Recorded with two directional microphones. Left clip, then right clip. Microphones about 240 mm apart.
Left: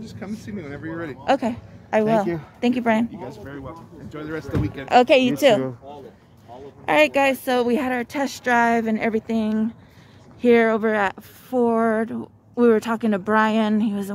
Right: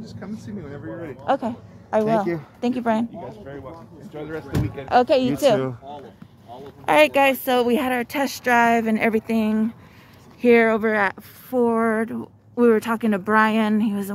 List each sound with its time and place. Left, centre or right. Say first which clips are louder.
0.0 s speech: left 2 dB; left
1.2 s a woman's voice: left 2 dB; centre
4.1 s speech: left 1 dB; left
4.8 s a woman's voice: left 2 dB; centre
6.9 s speech: right 1 dB; centre